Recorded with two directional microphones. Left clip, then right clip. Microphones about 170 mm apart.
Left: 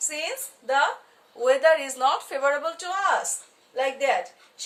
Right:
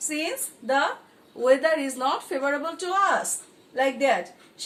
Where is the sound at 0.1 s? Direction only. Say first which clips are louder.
Right 4 dB; 30° left (ahead or behind).